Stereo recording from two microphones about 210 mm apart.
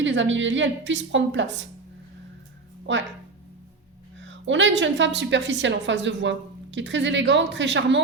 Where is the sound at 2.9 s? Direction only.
60° right (ahead or behind).